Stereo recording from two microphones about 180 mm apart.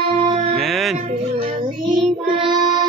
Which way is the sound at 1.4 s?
25° right (ahead or behind).